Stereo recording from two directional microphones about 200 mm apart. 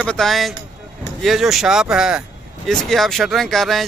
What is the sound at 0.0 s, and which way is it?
Speech, 5° left (ahead or behind).